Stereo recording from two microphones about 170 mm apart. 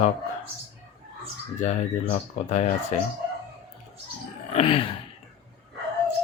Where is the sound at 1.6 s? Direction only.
45° left (ahead or behind).